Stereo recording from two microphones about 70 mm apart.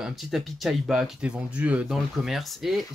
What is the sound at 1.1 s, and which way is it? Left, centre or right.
Speech, centre.